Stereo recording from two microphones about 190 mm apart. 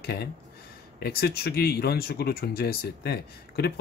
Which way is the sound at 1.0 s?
55° left (ahead or behind).